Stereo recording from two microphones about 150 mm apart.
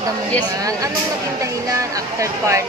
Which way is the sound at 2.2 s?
20° right (ahead or behind).